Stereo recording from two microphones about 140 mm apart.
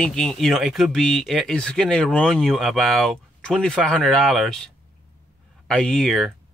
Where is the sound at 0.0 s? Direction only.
5° left (ahead or behind).